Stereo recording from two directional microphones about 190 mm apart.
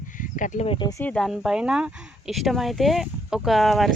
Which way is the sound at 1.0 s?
5° left (ahead or behind).